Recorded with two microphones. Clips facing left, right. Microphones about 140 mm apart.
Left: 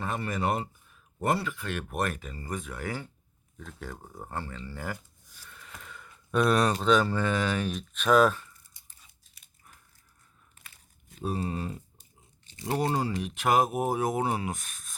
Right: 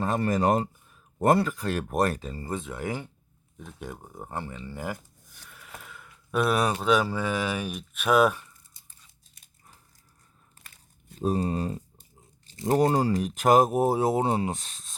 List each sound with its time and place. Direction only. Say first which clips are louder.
0.0 s speech: right 6 dB; 40° right (ahead or behind); by 4.9 s 15° right (ahead or behind)
5.5 s a sound: right 2 dB; 5° right (ahead or behind)
6.8 s speech: even; 10° right (ahead or behind)
9.4 s biting: right 1 dB; 30° right (ahead or behind)
11.2 s speech: right 5 dB; 40° right (ahead or behind)